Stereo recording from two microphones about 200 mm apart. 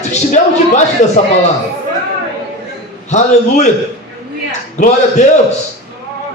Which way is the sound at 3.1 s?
35° left (ahead or behind).